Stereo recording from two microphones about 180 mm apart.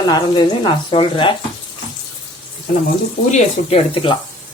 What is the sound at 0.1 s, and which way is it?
Speech, 25° left (ahead or behind).